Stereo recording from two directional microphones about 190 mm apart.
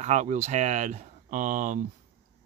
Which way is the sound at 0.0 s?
40° right (ahead or behind).